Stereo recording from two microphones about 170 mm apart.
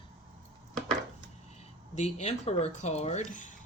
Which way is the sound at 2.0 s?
40° left (ahead or behind).